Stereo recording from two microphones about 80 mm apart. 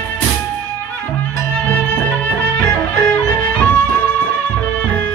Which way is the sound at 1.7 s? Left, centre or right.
Centre.